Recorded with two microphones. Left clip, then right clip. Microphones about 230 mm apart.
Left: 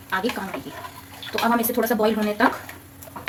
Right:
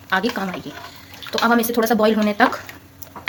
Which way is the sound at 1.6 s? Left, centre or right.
Right.